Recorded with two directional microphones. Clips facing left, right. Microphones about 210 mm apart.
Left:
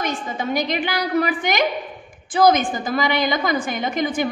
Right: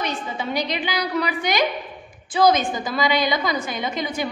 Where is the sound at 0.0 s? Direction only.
45° left (ahead or behind).